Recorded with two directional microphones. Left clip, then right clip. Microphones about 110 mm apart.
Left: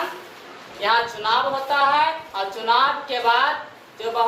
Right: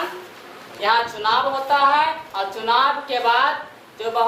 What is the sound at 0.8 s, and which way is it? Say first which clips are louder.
A woman's voice: right 1 dB; 25° right (ahead or behind).